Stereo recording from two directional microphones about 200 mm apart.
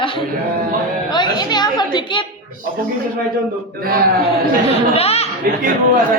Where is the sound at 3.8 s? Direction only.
45° right (ahead or behind).